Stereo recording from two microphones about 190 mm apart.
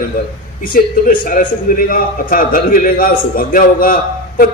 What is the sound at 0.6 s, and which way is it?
A man's voice, 45° left (ahead or behind).